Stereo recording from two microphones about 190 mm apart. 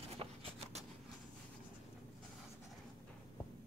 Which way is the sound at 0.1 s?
30° right (ahead or behind).